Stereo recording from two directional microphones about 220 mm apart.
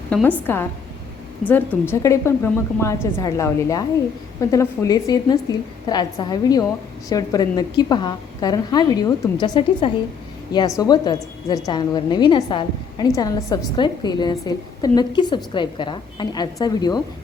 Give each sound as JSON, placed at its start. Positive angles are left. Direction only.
{"t": 0.1, "sound": "a woman's voice", "side_deg": 5}
{"t": 1.9, "sound": "a woman's voice", "side_deg": 15}